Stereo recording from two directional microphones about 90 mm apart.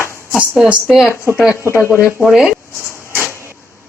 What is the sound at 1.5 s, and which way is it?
Speech, 30° left (ahead or behind).